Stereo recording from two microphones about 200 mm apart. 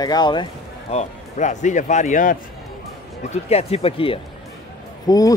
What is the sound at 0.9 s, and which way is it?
Speech, 35° left (ahead or behind).